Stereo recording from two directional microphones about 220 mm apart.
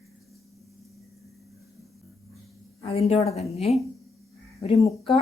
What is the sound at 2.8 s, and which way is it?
Speech, 25° left (ahead or behind).